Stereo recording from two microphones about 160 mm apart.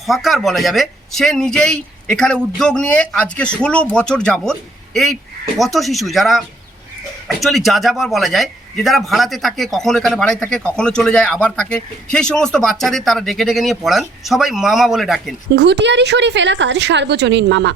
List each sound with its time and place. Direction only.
0.0 s a man's voice: centre (ahead or behind)
5.5 s a man's voice: centre (ahead or behind)
15.5 s a woman's voice: 90° right